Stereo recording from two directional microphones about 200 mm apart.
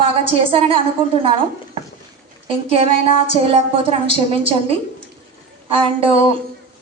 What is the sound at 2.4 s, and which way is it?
A woman's voice, 25° right (ahead or behind).